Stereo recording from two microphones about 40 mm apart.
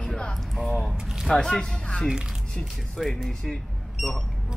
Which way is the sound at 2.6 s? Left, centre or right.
Centre.